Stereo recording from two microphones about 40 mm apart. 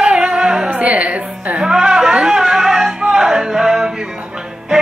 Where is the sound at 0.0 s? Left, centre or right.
Right.